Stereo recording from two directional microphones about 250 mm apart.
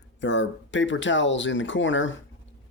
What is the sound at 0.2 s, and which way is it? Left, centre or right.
Speech, left.